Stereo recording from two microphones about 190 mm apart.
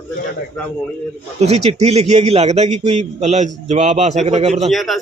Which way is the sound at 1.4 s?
35° right (ahead or behind).